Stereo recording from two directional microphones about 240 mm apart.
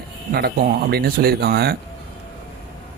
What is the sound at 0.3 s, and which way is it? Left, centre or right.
Speech, right.